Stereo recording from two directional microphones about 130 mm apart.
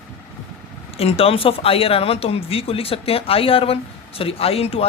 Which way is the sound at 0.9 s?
50° left (ahead or behind).